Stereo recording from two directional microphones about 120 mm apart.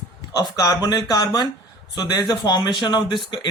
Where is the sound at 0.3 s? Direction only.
30° left (ahead or behind).